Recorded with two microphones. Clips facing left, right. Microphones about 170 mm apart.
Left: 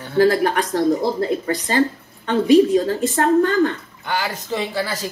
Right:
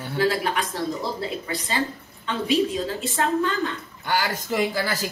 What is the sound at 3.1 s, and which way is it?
Speech, 55° left (ahead or behind).